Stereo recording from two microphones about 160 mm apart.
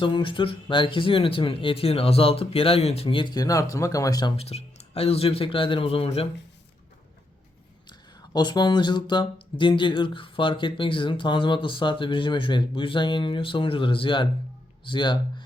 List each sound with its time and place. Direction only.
0.0 s speech: 30° left (ahead or behind)
4.4 s speech: 40° left (ahead or behind)
7.9 s speech: 30° left (ahead or behind)